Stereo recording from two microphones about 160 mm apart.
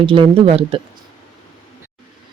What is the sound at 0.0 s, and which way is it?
Speech, 35° right (ahead or behind).